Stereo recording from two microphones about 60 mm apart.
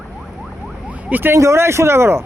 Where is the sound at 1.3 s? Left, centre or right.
Right.